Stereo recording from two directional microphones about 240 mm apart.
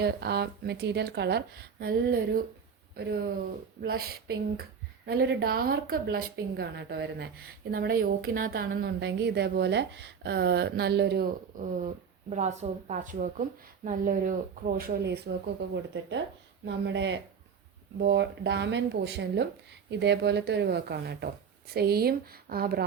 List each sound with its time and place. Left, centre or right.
0.0 s a woman's voice: right